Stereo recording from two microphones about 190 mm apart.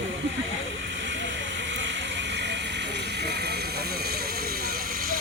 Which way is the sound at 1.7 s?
70° right (ahead or behind).